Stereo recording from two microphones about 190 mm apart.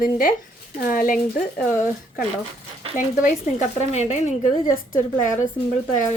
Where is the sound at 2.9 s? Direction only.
40° left (ahead or behind).